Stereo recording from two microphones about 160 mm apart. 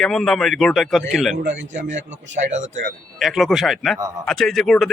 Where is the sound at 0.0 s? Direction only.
Centre (ahead or behind).